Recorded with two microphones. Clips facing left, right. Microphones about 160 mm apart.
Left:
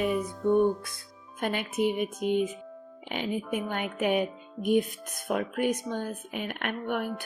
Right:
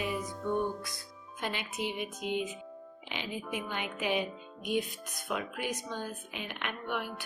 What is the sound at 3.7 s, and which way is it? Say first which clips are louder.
Speech: left 5 dB; 50° left (ahead or behind).